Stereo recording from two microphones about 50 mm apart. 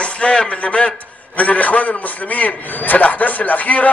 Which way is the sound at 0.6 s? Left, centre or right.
Left.